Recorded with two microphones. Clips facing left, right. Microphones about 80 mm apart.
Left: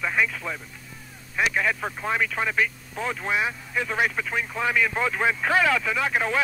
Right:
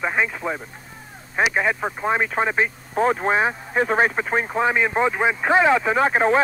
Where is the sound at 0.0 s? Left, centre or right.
Right.